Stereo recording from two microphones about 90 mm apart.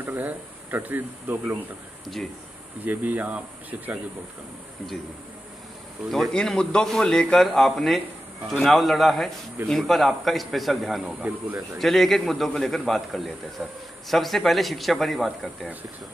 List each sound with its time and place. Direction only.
0.0 s speech: 20° right (ahead or behind)
2.8 s speech: 20° right (ahead or behind)
6.0 s a man's voice: centre (ahead or behind)